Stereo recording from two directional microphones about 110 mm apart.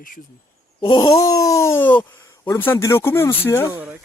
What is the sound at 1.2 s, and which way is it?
Speech, 30° left (ahead or behind).